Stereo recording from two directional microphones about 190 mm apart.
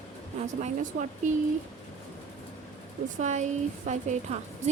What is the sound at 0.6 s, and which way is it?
Speech, 40° right (ahead or behind).